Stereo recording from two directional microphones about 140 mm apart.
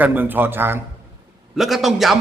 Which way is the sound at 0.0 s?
10° right (ahead or behind).